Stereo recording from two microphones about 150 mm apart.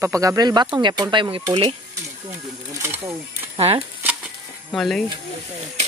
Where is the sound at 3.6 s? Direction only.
40° right (ahead or behind).